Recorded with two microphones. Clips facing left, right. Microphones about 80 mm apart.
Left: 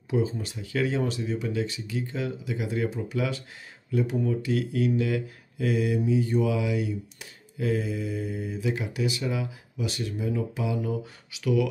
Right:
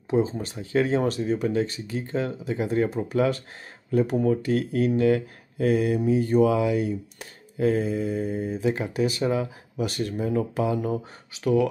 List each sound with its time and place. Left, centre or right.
0.1 s speech: right